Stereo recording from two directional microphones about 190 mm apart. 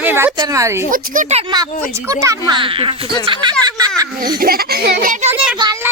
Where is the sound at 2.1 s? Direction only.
15° right (ahead or behind).